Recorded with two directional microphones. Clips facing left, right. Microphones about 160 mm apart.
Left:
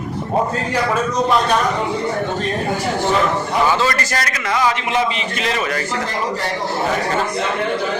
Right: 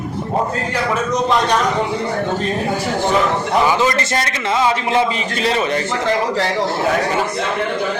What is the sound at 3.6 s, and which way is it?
A man's voice, 15° right (ahead or behind).